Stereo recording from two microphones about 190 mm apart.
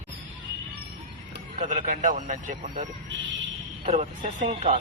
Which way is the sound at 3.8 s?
30° right (ahead or behind).